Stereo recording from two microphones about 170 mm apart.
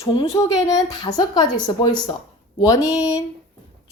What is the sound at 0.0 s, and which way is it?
Speech, 30° left (ahead or behind).